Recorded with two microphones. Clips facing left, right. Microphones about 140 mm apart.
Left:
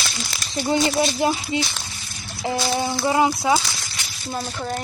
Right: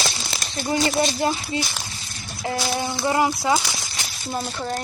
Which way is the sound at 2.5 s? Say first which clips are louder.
Left 2 dB; 10° right (ahead or behind).